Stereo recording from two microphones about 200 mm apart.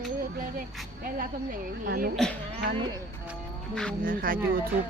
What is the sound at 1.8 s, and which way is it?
Speech, 45° right (ahead or behind).